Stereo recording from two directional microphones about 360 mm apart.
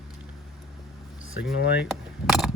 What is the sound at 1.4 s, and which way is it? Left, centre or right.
Speech, left.